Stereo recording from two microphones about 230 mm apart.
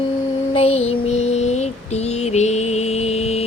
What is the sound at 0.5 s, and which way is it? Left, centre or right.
Child singing, left.